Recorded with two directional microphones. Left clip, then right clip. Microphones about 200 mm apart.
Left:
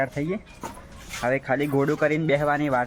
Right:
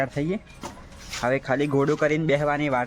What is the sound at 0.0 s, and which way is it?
Speech, 25° right (ahead or behind).